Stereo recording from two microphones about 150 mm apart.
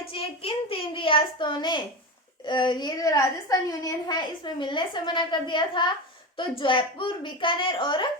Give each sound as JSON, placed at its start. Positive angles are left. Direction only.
{"t": 0.1, "sound": "a child's voice", "side_deg": 40}